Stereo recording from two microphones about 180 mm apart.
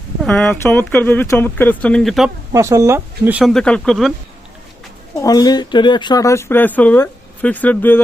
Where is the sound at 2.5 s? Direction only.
15° right (ahead or behind).